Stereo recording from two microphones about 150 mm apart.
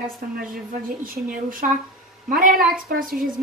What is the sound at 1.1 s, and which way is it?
A woman's voice, 70° right (ahead or behind).